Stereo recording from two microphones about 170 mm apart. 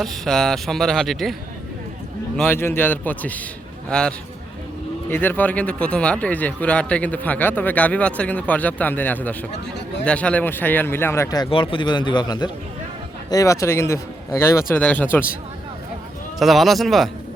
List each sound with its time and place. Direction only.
0.0 s speech: centre (ahead or behind)
2.3 s speech: 10° left (ahead or behind)
16.4 s speech: centre (ahead or behind)